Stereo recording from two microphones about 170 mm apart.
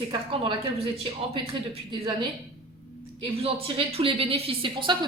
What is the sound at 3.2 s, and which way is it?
A woman's voice, 35° right (ahead or behind).